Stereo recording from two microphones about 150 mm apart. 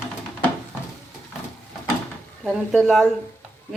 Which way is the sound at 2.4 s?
Centre (ahead or behind).